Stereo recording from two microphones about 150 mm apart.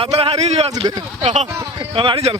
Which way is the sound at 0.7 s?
25° right (ahead or behind).